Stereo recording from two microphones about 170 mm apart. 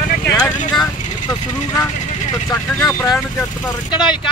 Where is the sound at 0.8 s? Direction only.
20° left (ahead or behind).